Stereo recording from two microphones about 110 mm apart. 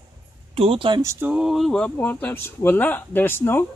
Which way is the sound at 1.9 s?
15° left (ahead or behind).